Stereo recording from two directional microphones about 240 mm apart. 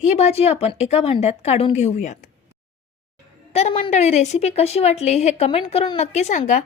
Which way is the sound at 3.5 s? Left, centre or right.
Left.